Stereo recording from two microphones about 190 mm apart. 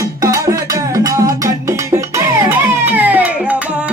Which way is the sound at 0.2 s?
15° right (ahead or behind).